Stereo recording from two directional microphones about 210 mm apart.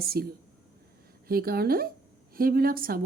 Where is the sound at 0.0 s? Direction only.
45° right (ahead or behind).